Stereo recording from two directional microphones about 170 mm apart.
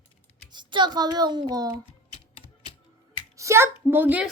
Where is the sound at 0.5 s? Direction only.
25° right (ahead or behind).